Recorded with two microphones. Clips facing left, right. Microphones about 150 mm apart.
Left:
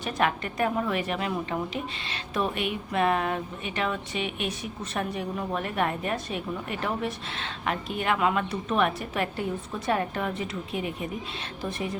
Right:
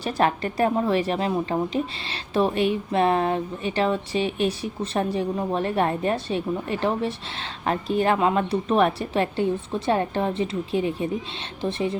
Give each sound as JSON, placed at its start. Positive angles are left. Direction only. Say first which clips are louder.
{"t": 0.0, "sound": "a woman's voice", "louder": "right 4 dB", "side_deg": -35}